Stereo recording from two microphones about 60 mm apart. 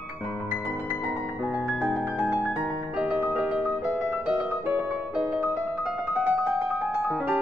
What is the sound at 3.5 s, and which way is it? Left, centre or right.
Music, right.